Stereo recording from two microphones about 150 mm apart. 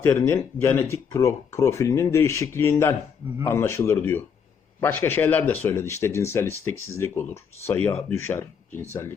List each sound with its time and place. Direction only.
0.0 s speech: 15° left (ahead or behind)